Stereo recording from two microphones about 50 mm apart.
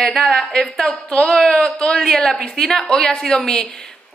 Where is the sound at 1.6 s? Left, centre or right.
Centre.